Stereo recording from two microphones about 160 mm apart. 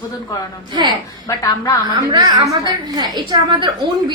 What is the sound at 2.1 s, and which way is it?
A woman's voice, 20° right (ahead or behind).